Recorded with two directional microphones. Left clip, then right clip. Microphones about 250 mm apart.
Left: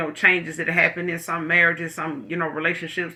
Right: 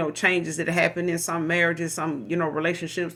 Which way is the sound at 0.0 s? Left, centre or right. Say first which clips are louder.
Left 4 dB; right.